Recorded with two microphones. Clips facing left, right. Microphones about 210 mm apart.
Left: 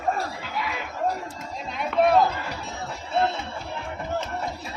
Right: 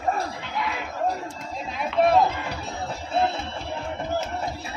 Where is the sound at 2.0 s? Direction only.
Centre (ahead or behind).